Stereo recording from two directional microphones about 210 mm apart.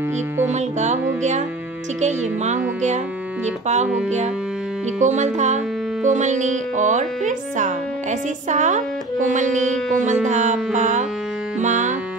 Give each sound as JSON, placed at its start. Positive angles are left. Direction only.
{"t": 0.5, "sound": "speech", "side_deg": -35}
{"t": 2.0, "sound": "speech", "side_deg": -35}
{"t": 3.6, "sound": "speech", "side_deg": -35}
{"t": 5.0, "sound": "speech", "side_deg": -35}
{"t": 11.6, "sound": "music", "side_deg": -35}